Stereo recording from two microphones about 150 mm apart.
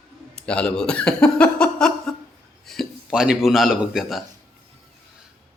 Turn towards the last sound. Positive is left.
turn(degrees=0)  # may be behind; listen again after turning